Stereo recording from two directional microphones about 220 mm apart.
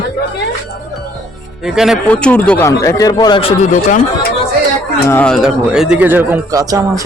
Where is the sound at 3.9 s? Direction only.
45° left (ahead or behind).